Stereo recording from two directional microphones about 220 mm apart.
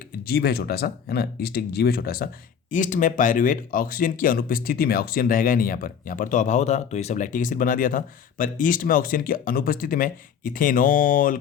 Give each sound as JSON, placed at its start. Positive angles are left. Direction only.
{"t": 0.3, "sound": "speech", "side_deg": 45}